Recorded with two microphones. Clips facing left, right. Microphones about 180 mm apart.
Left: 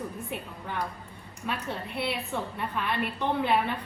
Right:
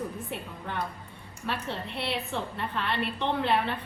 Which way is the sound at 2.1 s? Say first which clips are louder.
Right 2 dB; 5° left (ahead or behind).